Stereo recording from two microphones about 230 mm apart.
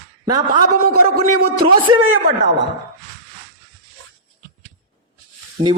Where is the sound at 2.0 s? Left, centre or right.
Right.